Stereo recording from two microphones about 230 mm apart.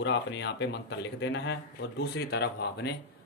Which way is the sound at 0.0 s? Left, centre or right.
Left.